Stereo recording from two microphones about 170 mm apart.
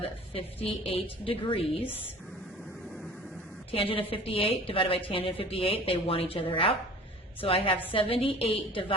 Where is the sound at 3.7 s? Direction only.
30° left (ahead or behind).